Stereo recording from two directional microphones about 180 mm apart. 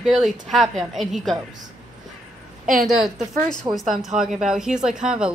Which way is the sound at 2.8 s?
Centre (ahead or behind).